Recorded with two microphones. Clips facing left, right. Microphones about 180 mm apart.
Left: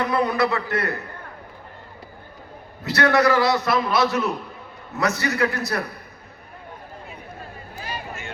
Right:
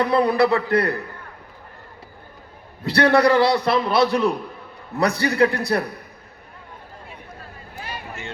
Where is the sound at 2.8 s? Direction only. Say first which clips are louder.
Right 2 dB; 30° right (ahead or behind).